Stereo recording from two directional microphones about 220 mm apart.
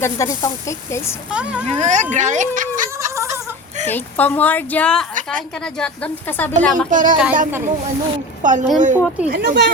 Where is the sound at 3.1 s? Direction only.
15° right (ahead or behind).